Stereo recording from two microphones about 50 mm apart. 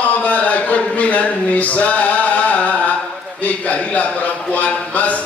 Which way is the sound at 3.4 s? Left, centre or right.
Left.